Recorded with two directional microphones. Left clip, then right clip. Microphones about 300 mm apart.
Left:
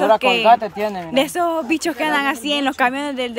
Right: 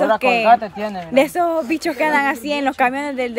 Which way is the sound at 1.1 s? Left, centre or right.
Centre.